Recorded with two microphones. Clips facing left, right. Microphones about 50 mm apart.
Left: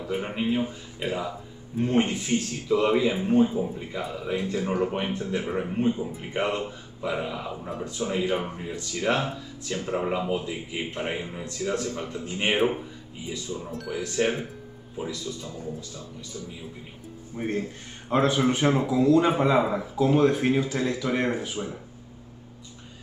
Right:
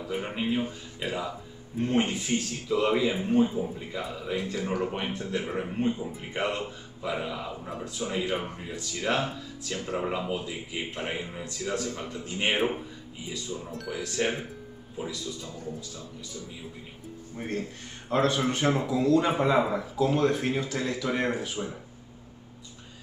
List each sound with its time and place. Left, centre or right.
0.0 s a man's voice: centre
17.4 s a man's voice: centre